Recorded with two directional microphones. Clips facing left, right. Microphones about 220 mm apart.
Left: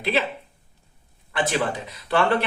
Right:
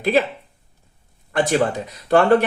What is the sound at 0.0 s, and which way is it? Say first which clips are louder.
Speech: right 6 dB; 45° right (ahead or behind).